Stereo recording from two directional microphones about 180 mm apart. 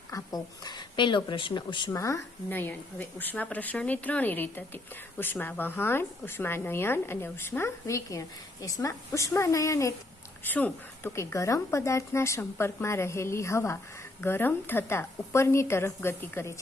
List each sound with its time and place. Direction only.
0.1 s a woman's voice: 20° left (ahead or behind)